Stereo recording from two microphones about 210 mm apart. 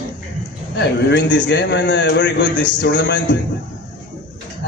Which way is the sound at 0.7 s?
55° left (ahead or behind).